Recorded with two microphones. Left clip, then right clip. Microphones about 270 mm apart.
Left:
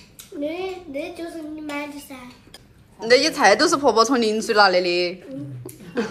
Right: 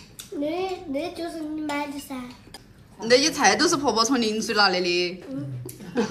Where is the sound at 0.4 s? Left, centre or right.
Right.